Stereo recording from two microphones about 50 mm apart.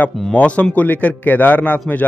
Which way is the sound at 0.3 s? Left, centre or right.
Left.